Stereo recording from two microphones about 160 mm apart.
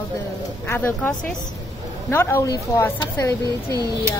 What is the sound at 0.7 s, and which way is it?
Speech, 15° left (ahead or behind).